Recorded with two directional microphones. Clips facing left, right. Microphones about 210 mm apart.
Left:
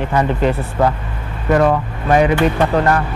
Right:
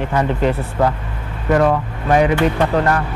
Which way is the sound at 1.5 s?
20° left (ahead or behind).